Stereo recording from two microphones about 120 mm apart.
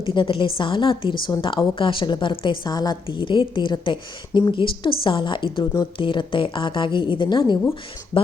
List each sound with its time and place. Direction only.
0.0 s a woman's voice: 45° left (ahead or behind)